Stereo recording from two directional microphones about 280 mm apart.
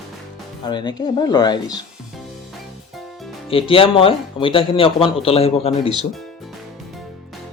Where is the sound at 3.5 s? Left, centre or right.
Centre.